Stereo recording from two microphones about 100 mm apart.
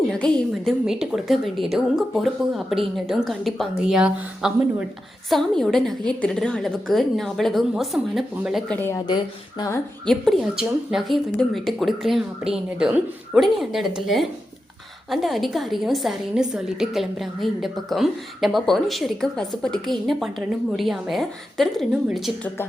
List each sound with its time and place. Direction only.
0.1 s a woman's voice: 5° left (ahead or behind)
0.9 s a woman's voice: 5° right (ahead or behind)
5.3 s a woman's voice: 5° left (ahead or behind)
9.0 s speech: 45° left (ahead or behind)
10.1 s a woman's voice: 5° left (ahead or behind)